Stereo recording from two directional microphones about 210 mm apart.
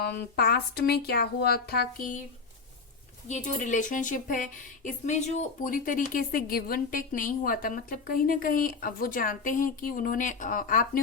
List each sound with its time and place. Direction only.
0.0 s speech: 50° left (ahead or behind)
3.2 s speech: 35° left (ahead or behind)